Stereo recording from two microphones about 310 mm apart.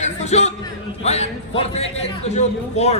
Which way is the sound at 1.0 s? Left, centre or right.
Left.